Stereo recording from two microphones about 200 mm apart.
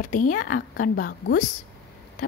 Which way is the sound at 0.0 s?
40° left (ahead or behind).